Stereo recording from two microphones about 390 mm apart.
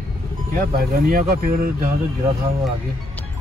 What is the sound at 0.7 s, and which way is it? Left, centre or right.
Speech, right.